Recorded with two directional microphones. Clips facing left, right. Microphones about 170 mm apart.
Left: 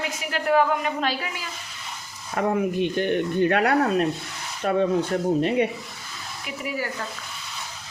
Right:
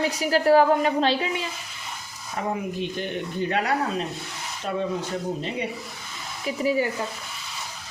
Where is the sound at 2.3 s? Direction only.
60° left (ahead or behind).